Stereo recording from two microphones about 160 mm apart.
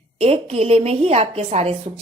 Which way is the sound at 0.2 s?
40° right (ahead or behind).